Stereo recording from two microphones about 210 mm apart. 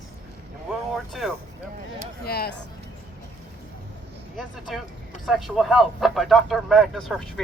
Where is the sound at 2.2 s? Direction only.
50° left (ahead or behind).